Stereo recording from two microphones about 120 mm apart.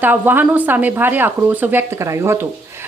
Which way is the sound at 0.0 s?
15° right (ahead or behind).